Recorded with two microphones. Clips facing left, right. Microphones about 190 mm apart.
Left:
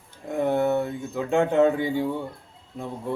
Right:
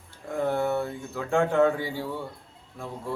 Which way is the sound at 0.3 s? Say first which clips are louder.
Left 3 dB; 20° left (ahead or behind).